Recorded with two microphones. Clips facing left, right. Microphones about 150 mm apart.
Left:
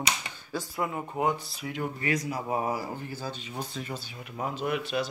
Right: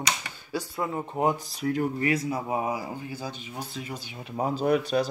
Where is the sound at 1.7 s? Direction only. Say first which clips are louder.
Right 5 dB; 40° right (ahead or behind).